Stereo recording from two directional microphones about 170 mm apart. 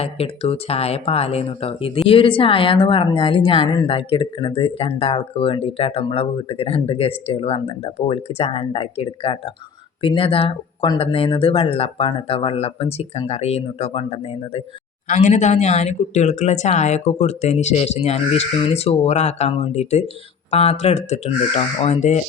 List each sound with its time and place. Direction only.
0.0 s a woman's voice: 35° left (ahead or behind)